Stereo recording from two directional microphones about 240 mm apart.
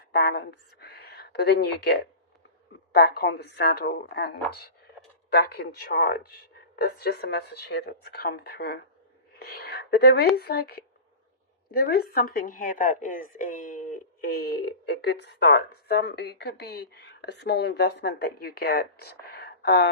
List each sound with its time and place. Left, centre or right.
0.1 s a woman's voice: left